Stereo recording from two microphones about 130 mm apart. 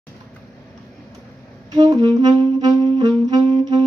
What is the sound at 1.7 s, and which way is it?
Saxophone, 35° right (ahead or behind).